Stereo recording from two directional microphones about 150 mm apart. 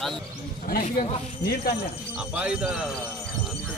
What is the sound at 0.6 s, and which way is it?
Speech, 85° left.